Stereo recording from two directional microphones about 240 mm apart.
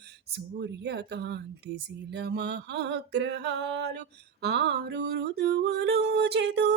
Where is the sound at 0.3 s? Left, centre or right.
Right.